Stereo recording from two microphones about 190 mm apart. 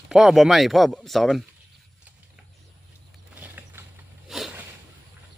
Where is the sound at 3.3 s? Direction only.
10° right (ahead or behind).